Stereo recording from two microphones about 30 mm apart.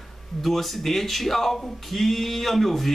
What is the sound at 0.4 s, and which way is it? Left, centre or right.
Speech, centre.